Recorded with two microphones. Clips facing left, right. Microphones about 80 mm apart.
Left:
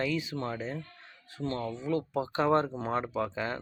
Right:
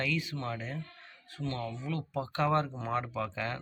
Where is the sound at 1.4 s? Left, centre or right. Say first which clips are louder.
Left 3 dB; left.